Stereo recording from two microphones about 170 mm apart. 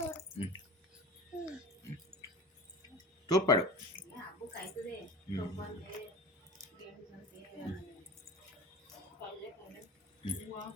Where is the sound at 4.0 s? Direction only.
10° right (ahead or behind).